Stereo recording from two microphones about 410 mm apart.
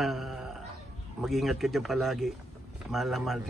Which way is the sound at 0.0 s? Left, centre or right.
Centre.